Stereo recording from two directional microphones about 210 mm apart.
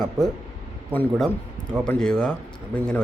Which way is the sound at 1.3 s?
10° right (ahead or behind).